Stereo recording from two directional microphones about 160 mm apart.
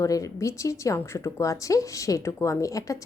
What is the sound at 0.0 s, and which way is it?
A woman's voice, 20° left (ahead or behind).